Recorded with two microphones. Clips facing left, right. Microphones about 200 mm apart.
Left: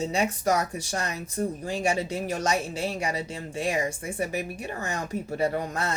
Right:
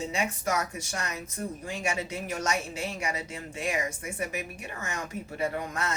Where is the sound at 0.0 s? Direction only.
35° left (ahead or behind).